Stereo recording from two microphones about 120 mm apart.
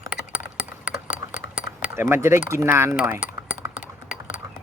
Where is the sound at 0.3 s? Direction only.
15° right (ahead or behind).